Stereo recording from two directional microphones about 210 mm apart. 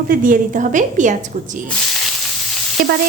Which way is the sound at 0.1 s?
40° right (ahead or behind).